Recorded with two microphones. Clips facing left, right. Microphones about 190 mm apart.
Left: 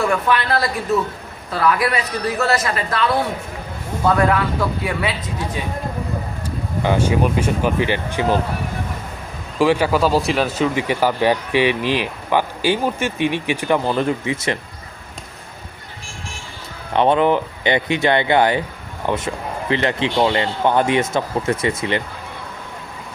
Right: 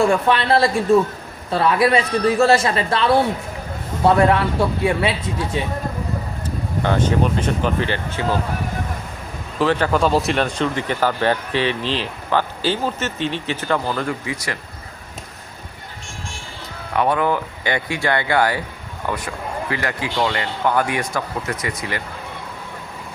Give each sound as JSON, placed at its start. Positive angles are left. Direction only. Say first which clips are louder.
{"t": 0.0, "sound": "a man's voice", "louder": "right 2 dB", "side_deg": -30}
{"t": 5.6, "sound": "a man's voice", "louder": "right 4 dB", "side_deg": -25}
{"t": 6.8, "sound": "speech", "louder": "left 1 dB", "side_deg": 10}
{"t": 9.6, "sound": "speech", "louder": "left 2 dB", "side_deg": 10}
{"t": 16.9, "sound": "speech", "louder": "left 4 dB", "side_deg": 25}